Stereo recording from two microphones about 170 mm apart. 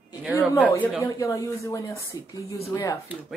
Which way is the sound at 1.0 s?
20° left (ahead or behind).